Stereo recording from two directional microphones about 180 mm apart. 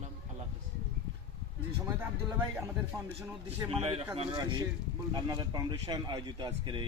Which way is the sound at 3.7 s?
30° right (ahead or behind).